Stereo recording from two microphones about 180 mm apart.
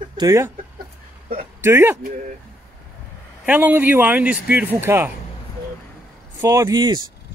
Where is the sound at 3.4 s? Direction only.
10° right (ahead or behind).